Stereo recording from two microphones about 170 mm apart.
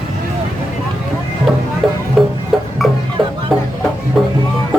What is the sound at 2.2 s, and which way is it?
Music, centre (ahead or behind).